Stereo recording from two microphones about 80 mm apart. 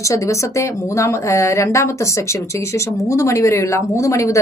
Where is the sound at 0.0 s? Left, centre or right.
Left.